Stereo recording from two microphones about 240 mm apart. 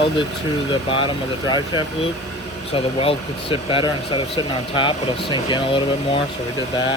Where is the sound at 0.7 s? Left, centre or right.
Centre.